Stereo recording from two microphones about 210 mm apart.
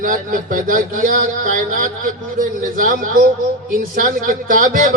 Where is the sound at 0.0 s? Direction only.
40° right (ahead or behind).